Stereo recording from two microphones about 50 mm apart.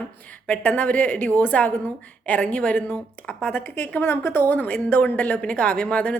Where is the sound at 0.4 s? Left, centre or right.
Left.